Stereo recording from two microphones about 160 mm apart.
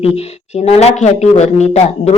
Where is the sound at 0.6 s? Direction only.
40° left (ahead or behind).